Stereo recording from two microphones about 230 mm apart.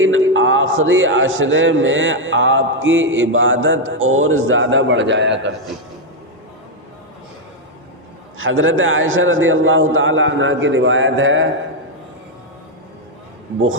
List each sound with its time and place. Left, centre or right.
0.0 s a man's voice: right
8.4 s a man's voice: right